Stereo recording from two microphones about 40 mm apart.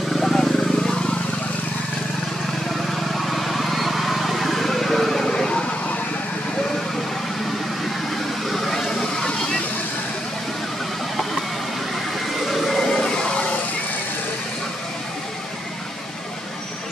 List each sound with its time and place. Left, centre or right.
0.1 s vehicle: centre
2.9 s vehicle: centre
8.5 s vehicle: centre
12.4 s a sound: centre